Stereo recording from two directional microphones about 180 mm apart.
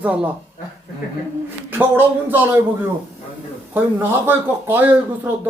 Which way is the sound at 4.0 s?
10° right (ahead or behind).